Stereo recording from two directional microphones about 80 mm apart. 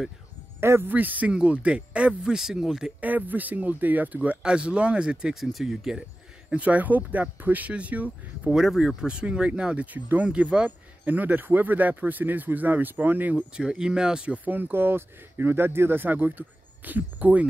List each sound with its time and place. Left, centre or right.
0.6 s speech: right; by 2.9 s centre
3.0 s speech: right; by 5.9 s centre
6.5 s speech: centre
8.5 s speech: centre; by 13.4 s right
13.6 s speech: centre